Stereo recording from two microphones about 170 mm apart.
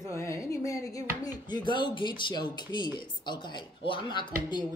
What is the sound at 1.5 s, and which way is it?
Speech, 25° left (ahead or behind).